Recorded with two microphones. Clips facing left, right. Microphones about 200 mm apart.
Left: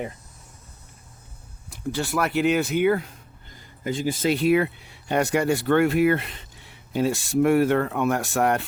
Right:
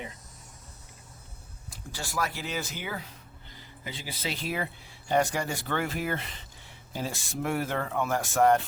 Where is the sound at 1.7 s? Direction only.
65° left (ahead or behind).